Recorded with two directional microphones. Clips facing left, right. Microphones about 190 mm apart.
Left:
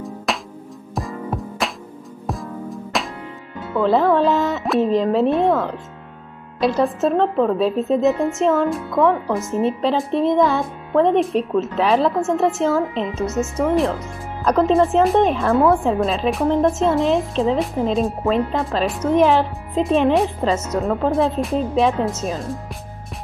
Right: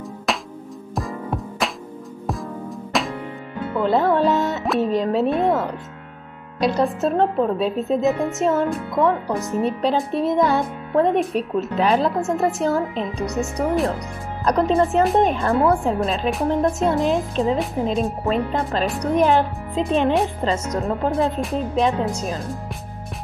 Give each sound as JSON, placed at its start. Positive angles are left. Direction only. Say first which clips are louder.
{"t": 0.3, "sound": "music", "louder": "right 1 dB", "side_deg": 0}
{"t": 3.9, "sound": "speech", "louder": "left 2 dB", "side_deg": 0}
{"t": 6.6, "sound": "speech", "louder": "left 2 dB", "side_deg": 0}